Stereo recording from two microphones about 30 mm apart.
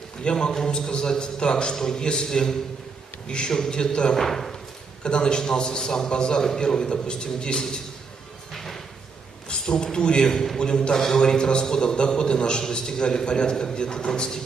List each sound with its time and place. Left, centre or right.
0.2 s a man's voice: left
4.2 s speech: centre
5.0 s a man's voice: left
8.5 s a sound: centre
9.5 s a sound: left
9.9 s a man's voice: left